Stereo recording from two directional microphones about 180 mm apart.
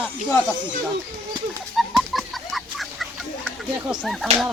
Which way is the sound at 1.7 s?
Centre (ahead or behind).